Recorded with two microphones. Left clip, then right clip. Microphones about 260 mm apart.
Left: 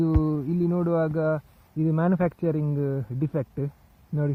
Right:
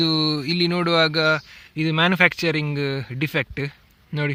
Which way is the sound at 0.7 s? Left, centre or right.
Right.